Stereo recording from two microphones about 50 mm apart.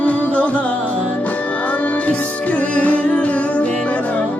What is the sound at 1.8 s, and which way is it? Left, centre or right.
Music, left.